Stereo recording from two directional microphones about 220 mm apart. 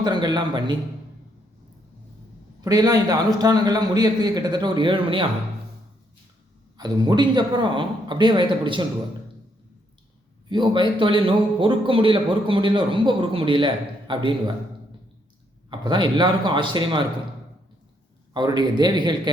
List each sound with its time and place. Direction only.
0.0 s a man's voice: 20° right (ahead or behind)
2.6 s a man's voice: 15° right (ahead or behind)
6.7 s a man's voice: 20° right (ahead or behind)
10.5 s a man's voice: 20° right (ahead or behind)
15.7 s a man's voice: 20° right (ahead or behind)
18.3 s a man's voice: 20° right (ahead or behind)